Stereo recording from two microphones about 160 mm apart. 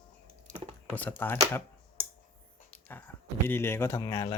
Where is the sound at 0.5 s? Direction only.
10° left (ahead or behind).